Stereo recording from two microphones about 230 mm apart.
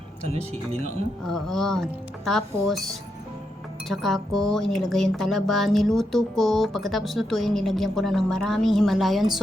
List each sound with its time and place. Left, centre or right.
0.2 s speech: right
1.3 s speech: centre